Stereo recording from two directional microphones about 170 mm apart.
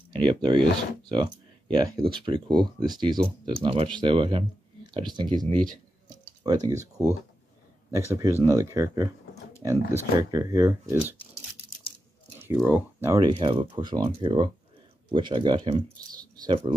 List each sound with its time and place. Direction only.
0.3 s speech: 25° right (ahead or behind)
8.1 s speech: 20° right (ahead or behind)
12.4 s speech: 15° right (ahead or behind)